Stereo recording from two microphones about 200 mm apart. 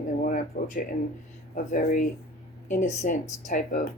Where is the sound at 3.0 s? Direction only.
40° left (ahead or behind).